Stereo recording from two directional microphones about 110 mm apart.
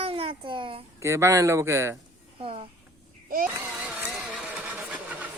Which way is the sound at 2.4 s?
60° right (ahead or behind).